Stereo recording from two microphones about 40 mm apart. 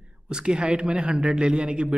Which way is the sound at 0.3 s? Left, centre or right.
Right.